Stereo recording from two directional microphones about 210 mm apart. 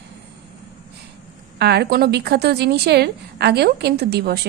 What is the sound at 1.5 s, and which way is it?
A woman's voice, 50° right (ahead or behind).